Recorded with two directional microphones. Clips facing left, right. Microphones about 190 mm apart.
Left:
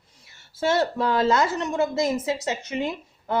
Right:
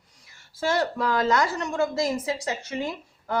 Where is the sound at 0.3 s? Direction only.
25° left (ahead or behind).